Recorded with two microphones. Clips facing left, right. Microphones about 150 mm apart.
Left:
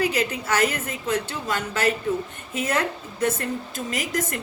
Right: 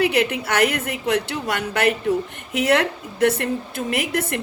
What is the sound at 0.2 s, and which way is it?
A woman's voice, 65° right (ahead or behind).